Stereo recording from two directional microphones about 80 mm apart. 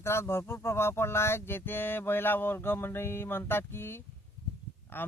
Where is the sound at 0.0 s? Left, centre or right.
Left.